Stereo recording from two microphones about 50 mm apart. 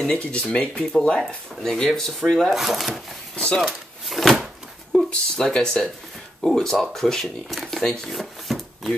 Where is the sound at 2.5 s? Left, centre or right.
Centre.